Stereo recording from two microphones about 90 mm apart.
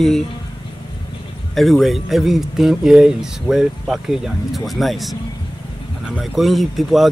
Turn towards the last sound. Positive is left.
turn(degrees=0)  # may be behind; listen again after turning